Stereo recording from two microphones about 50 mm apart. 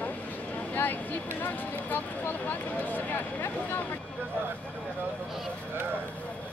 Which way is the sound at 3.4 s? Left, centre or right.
Left.